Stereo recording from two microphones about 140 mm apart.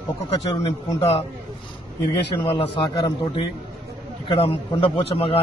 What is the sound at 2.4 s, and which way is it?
A man's voice, 40° left (ahead or behind).